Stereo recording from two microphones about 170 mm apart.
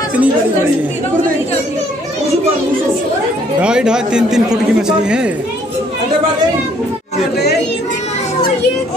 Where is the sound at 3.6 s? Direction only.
5° right (ahead or behind).